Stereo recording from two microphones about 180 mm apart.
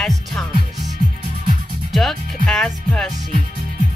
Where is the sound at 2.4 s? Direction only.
5° left (ahead or behind).